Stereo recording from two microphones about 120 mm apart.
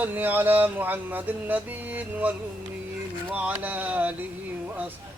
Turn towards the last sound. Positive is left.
turn(degrees=-15)  # may be behind; listen again after turning